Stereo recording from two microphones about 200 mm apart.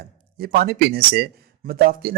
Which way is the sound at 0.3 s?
50° right (ahead or behind).